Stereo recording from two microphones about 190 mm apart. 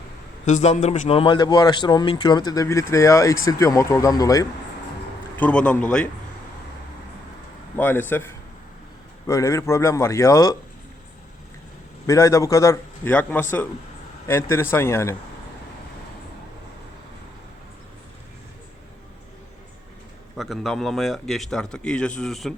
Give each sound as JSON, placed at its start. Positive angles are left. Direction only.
{"t": 0.4, "sound": "a man's voice", "side_deg": 35}
{"t": 5.4, "sound": "a man's voice", "side_deg": 5}
{"t": 7.8, "sound": "a man's voice", "side_deg": 10}
{"t": 12.0, "sound": "a man's voice", "side_deg": 15}
{"t": 20.3, "sound": "speech", "side_deg": 0}